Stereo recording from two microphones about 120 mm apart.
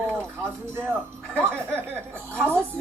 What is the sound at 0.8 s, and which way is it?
Speech, 10° left (ahead or behind).